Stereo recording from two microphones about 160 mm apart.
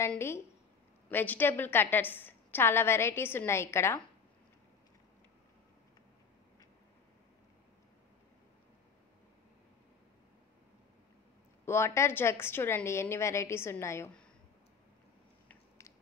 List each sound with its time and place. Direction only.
0.0 s a woman's voice: 15° left (ahead or behind)
11.6 s a woman's voice: 15° left (ahead or behind)